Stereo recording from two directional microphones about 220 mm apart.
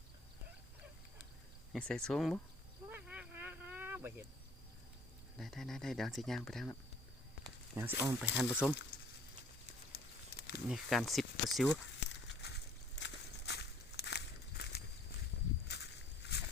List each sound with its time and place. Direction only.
1.7 s speech: 5° left (ahead or behind)
2.9 s a sound: 10° right (ahead or behind)
5.4 s speech: centre (ahead or behind)
7.8 s speech: 10° right (ahead or behind)
9.9 s crumpling: 45° left (ahead or behind)
10.7 s speech: centre (ahead or behind)
11.9 s a sound: 50° left (ahead or behind)